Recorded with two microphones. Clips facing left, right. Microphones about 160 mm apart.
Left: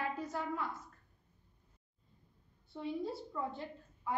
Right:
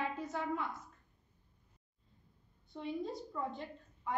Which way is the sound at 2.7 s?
5° left (ahead or behind).